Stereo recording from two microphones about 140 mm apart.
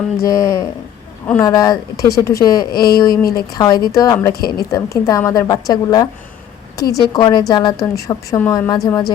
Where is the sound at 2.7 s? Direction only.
90° left.